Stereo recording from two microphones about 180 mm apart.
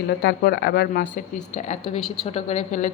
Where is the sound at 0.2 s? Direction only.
70° left (ahead or behind).